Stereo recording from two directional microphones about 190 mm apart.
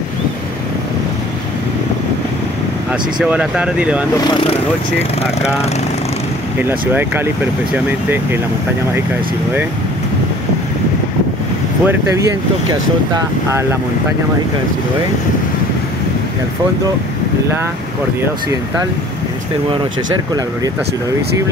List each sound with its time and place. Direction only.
3.2 s speech: 5° right (ahead or behind)
4.2 s speech: 25° left (ahead or behind)
6.6 s speech: 10° right (ahead or behind)
11.8 s speech: 10° right (ahead or behind)